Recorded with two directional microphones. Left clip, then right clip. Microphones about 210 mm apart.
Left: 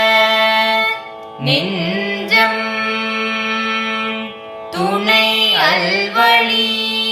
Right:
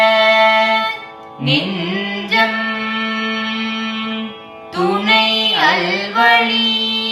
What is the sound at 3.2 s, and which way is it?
Music, 20° left (ahead or behind).